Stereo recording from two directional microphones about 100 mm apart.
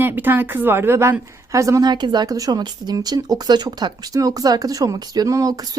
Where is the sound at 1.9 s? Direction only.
45° right (ahead or behind).